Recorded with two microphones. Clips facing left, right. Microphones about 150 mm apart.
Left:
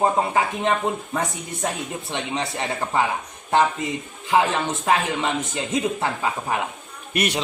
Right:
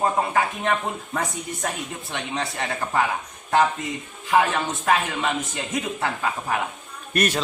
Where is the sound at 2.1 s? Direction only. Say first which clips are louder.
Left 2 dB; 20° left (ahead or behind).